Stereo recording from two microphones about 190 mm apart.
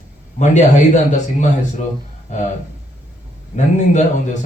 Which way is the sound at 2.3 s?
40° left (ahead or behind).